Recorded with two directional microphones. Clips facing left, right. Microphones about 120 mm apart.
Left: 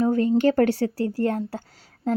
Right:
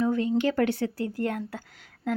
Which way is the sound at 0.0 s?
40° left (ahead or behind).